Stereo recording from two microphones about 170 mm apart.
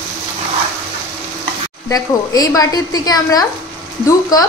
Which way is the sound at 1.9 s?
20° left (ahead or behind).